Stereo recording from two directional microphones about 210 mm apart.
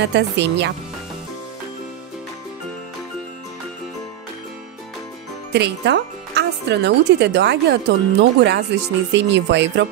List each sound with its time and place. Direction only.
0.0 s speech: 55° right (ahead or behind)
5.5 s speech: 55° right (ahead or behind)